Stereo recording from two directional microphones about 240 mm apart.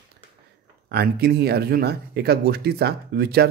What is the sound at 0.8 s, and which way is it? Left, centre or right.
Speech, right.